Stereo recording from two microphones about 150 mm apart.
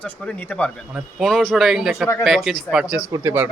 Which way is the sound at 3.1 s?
15° right (ahead or behind).